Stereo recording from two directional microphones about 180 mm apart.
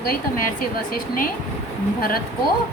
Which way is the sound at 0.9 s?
50° left (ahead or behind).